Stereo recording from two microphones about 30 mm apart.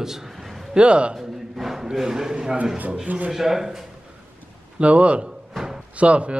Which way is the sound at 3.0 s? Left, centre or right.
Right.